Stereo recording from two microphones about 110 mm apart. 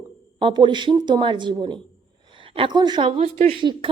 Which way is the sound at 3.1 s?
70° right (ahead or behind).